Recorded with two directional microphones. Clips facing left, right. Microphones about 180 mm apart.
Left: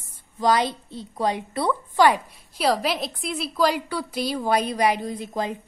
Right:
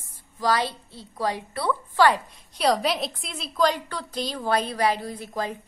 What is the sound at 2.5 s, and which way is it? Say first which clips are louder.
A woman's voice: even; centre (ahead or behind).